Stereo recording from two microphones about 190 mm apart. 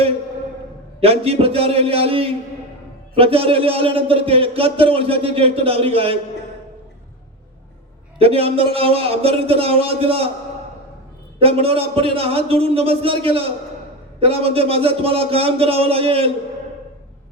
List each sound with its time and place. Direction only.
0.9 s a man's voice: 30° right (ahead or behind)
8.2 s a man's voice: 30° right (ahead or behind)
11.3 s a man's voice: 30° right (ahead or behind)